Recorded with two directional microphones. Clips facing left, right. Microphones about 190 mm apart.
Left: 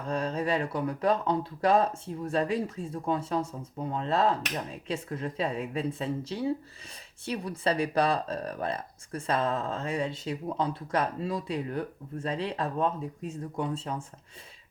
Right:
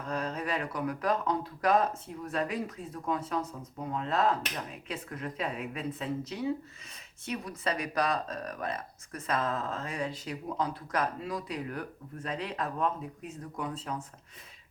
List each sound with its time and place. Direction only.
0.0 s speech: 30° left (ahead or behind)